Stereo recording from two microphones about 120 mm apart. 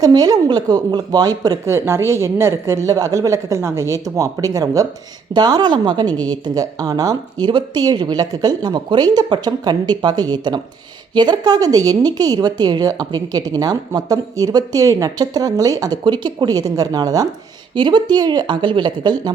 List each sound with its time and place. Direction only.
0.0 s a woman's voice: 30° right (ahead or behind)
17.7 s a woman's voice: 40° right (ahead or behind)